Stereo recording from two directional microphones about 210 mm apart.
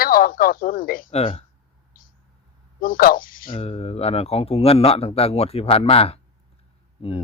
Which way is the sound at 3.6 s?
30° left (ahead or behind).